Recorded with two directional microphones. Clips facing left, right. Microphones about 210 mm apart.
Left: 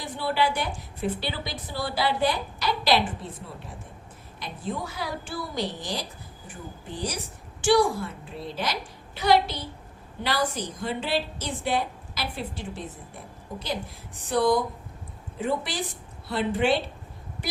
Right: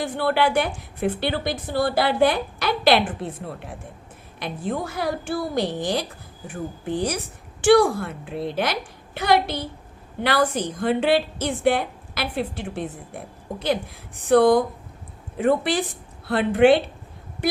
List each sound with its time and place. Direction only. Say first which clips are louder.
0.0 s a woman's voice: right 5 dB; 55° right (ahead or behind)
14.3 s a woman's voice: right 7 dB; 55° right (ahead or behind)